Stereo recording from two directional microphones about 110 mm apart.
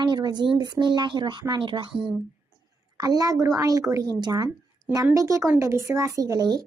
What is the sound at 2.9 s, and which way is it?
Speech, 35° right (ahead or behind).